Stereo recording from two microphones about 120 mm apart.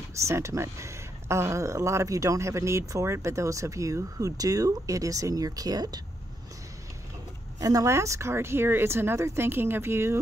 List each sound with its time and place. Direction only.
0.1 s speech: 25° right (ahead or behind)
7.6 s speech: 25° right (ahead or behind)